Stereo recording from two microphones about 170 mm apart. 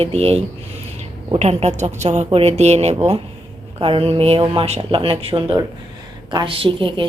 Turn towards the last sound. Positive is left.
turn(degrees=-30)  # may be behind; listen again after turning